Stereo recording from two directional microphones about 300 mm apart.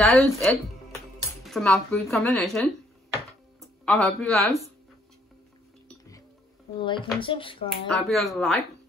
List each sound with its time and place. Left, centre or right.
0.0 s speech: centre
5.9 s dishes: centre
6.8 s speech: centre
7.9 s speech: centre